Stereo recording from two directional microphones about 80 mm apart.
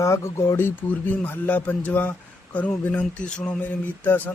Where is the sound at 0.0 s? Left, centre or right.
Left.